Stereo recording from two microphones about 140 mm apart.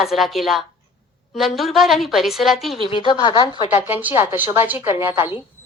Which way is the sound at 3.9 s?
15° right (ahead or behind).